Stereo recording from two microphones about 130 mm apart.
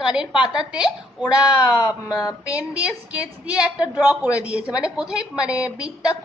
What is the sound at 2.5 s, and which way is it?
A woman's voice, 10° right (ahead or behind).